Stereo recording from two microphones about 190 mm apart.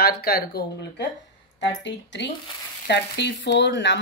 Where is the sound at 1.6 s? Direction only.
70° left (ahead or behind).